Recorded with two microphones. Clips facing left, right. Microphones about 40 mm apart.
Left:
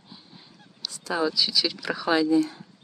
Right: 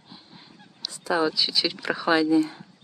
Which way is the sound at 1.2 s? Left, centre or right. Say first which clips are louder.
Even; right.